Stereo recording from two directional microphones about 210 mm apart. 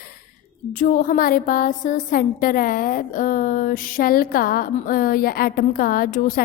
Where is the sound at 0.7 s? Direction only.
40° left (ahead or behind).